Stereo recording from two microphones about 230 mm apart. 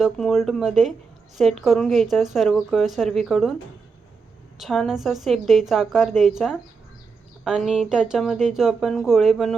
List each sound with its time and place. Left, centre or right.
0.0 s a woman's voice: centre
4.5 s a woman's voice: centre